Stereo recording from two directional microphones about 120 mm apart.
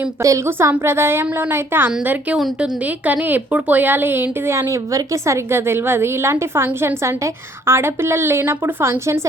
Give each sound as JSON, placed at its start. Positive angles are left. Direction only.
{"t": 0.2, "sound": "a woman's voice", "side_deg": -25}
{"t": 1.9, "sound": "a woman's voice", "side_deg": -5}